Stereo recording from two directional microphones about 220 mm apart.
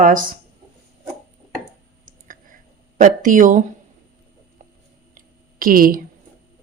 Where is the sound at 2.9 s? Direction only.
35° right (ahead or behind).